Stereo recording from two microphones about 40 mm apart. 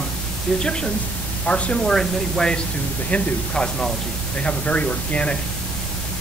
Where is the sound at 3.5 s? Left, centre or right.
Centre.